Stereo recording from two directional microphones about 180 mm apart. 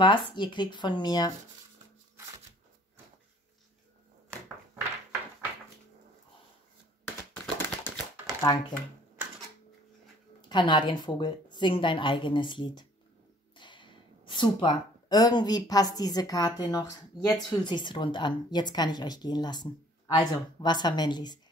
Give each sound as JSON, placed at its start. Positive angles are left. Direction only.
{"t": 0.0, "sound": "a woman's voice", "side_deg": 25}
{"t": 7.1, "sound": "typewriter", "side_deg": 10}
{"t": 10.5, "sound": "a woman's voice", "side_deg": 25}
{"t": 17.6, "sound": "a woman's voice", "side_deg": 25}